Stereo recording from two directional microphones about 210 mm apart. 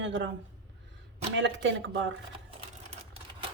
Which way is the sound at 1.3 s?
60° right (ahead or behind).